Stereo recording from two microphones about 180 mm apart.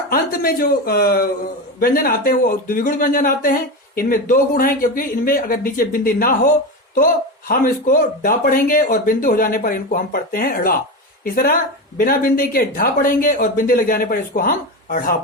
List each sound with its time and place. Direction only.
0.1 s speech: 55° left (ahead or behind)